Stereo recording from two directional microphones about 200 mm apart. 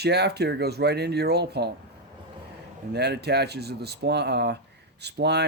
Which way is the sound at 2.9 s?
55° right (ahead or behind).